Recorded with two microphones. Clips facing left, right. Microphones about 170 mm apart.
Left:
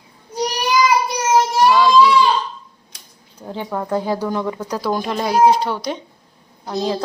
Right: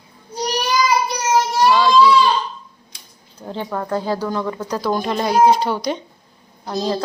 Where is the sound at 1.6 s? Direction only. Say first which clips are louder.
Even; 10° left (ahead or behind).